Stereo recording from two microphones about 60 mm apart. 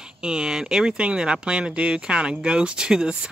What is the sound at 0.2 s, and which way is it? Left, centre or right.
Speech, centre.